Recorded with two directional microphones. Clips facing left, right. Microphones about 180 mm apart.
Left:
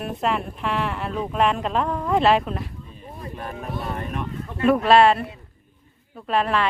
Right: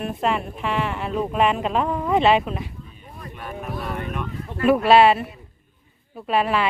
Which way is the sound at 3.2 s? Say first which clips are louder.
Left 1 dB; 35° left (ahead or behind).